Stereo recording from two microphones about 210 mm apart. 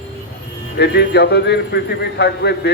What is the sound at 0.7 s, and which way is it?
A man's voice, 55° left (ahead or behind).